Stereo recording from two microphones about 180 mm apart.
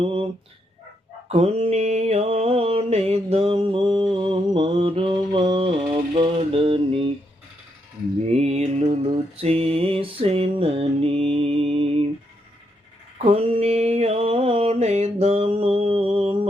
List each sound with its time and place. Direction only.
0.0 s dog: 30° right (ahead or behind)
1.3 s mantra: 35° right (ahead or behind)
8.3 s mantra: 35° right (ahead or behind)
13.2 s mantra: 35° right (ahead or behind)